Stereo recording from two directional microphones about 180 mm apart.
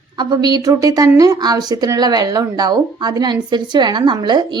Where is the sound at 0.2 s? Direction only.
20° right (ahead or behind).